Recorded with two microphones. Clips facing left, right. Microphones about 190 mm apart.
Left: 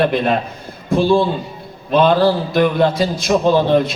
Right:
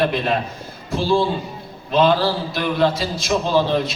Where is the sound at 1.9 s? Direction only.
55° left (ahead or behind).